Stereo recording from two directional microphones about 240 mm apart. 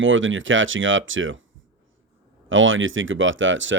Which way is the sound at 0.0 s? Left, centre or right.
Right.